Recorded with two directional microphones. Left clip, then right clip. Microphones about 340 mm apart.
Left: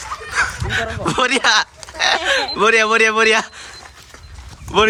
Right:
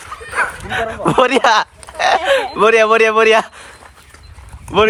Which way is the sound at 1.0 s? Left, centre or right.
Centre.